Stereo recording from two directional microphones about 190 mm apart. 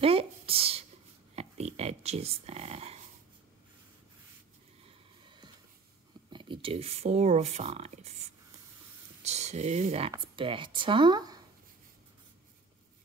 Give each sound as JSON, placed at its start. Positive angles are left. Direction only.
{"t": 0.0, "sound": "a sound", "side_deg": -30}
{"t": 4.8, "sound": "music", "side_deg": -25}
{"t": 6.3, "sound": "speech", "side_deg": -25}